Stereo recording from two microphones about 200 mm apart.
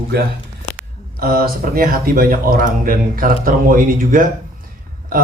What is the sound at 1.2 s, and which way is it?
A man's voice, 45° right (ahead or behind).